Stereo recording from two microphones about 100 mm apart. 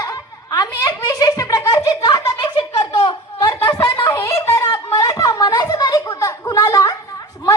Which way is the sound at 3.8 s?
45° left (ahead or behind).